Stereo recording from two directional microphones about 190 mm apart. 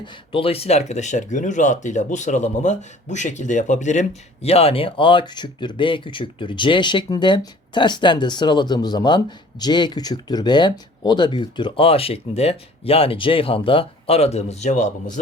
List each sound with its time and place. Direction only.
0.0 s speech: 30° left (ahead or behind)